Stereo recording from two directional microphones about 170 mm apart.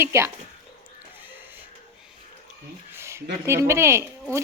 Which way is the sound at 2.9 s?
15° right (ahead or behind).